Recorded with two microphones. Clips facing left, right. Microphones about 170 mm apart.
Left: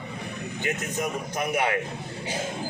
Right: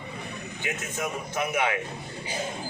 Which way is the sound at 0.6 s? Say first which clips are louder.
Left 3 dB; 40° left (ahead or behind).